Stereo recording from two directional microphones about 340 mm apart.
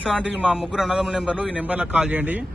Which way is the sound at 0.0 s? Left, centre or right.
Centre.